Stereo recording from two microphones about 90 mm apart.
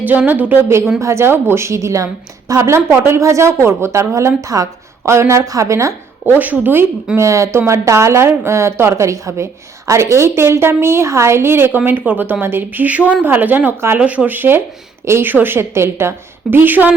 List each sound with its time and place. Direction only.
0.0 s a woman's voice: 20° right (ahead or behind)
0.9 s a woman's voice: 30° right (ahead or behind)
6.4 s a woman's voice: 20° right (ahead or behind)
7.2 s a woman's voice: 35° right (ahead or behind)